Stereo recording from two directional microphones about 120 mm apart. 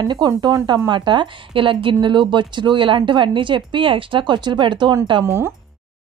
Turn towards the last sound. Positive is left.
turn(degrees=-20)  # may be behind; listen again after turning